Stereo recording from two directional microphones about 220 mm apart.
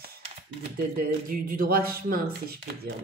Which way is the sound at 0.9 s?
40° right (ahead or behind).